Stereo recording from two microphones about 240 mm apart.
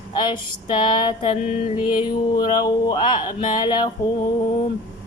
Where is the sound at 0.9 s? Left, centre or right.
Centre.